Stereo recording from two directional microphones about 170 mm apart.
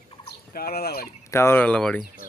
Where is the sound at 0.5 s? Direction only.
65° left (ahead or behind).